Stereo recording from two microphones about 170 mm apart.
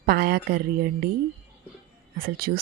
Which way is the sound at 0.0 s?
65° right (ahead or behind).